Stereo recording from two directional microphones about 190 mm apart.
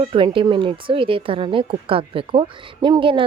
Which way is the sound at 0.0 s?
25° right (ahead or behind).